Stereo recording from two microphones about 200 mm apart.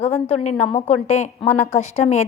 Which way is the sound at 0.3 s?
30° left (ahead or behind).